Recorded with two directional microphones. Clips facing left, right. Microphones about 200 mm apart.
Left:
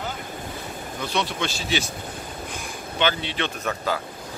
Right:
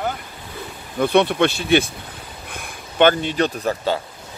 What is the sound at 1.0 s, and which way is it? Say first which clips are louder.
Speech: right 11 dB; 55° right (ahead or behind).